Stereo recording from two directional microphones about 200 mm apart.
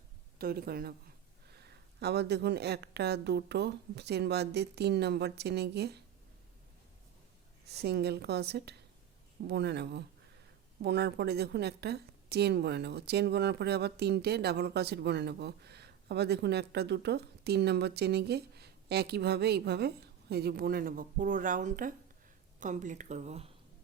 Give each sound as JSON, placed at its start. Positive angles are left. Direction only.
{"t": 0.3, "sound": "a woman's voice", "side_deg": -50}
{"t": 7.7, "sound": "a woman's voice", "side_deg": -55}